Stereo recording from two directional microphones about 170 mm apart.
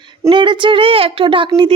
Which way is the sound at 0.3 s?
30° right (ahead or behind).